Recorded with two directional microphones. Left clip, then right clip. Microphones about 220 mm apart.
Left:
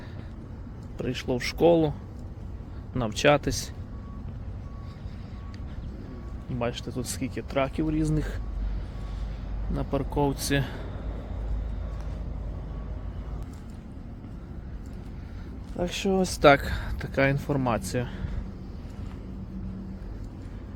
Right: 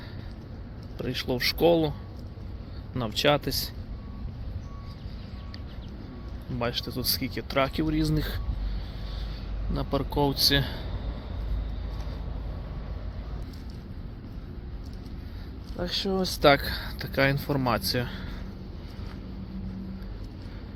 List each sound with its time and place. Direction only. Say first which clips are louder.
0.9 s speech: even; 15° left (ahead or behind)
2.9 s speech: left 2 dB; 20° left (ahead or behind)
6.6 s speech: right 1 dB; 5° left (ahead or behind)
9.7 s speech: even; centre (ahead or behind)
15.8 s speech: left 2 dB; 25° left (ahead or behind)
16.5 s speech: left 2 dB; 15° left (ahead or behind)